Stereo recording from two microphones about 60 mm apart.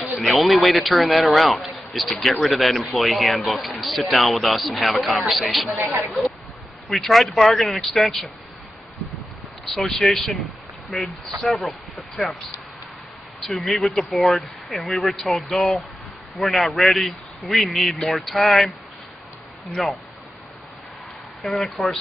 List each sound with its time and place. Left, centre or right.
0.2 s speech: centre
5.8 s speech: right
6.9 s speech: centre
9.7 s speech: centre
13.6 s speech: centre
19.7 s speech: centre
21.4 s speech: centre